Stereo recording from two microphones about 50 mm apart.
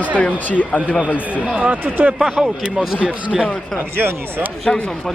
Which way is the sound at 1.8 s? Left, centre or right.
Right.